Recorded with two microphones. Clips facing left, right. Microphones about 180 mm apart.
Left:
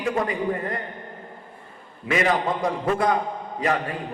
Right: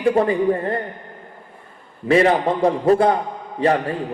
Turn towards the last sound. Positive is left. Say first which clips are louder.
# right 6 dB
turn(degrees=-30)  # may be behind; listen again after turning